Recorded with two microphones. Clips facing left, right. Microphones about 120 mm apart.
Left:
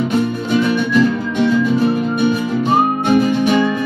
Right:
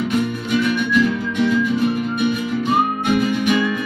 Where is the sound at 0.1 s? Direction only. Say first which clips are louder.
Left 3 dB; 30° left (ahead or behind).